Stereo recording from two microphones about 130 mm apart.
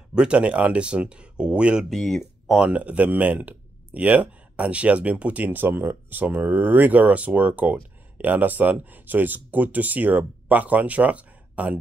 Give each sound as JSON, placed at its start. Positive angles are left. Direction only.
{"t": 0.1, "sound": "speech", "side_deg": -10}